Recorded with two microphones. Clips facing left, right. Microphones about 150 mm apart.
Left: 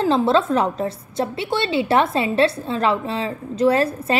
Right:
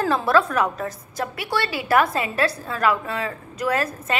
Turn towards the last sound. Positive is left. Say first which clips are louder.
# left 5 dB
turn(degrees=30)  # may be behind; listen again after turning